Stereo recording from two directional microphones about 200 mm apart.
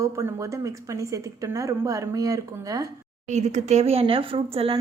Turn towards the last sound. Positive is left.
turn(degrees=-30)  # may be behind; listen again after turning